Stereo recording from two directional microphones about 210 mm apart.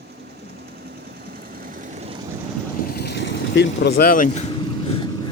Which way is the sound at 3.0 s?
55° left (ahead or behind).